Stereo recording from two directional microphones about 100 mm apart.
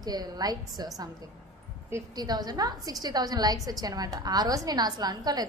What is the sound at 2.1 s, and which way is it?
A woman's voice, 40° right (ahead or behind).